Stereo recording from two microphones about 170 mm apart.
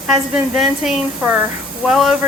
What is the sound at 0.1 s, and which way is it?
Speech, centre (ahead or behind).